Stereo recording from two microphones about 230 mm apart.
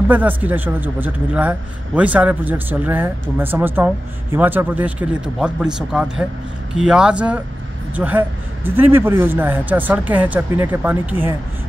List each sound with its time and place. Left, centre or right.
0.1 s speech: centre